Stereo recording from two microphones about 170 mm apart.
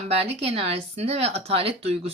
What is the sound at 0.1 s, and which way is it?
A woman's voice, 35° right (ahead or behind).